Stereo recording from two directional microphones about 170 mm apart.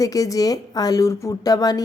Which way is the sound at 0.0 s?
20° left (ahead or behind).